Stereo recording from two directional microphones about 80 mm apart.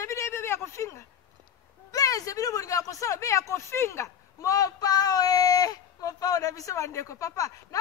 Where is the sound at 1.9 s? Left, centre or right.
Left.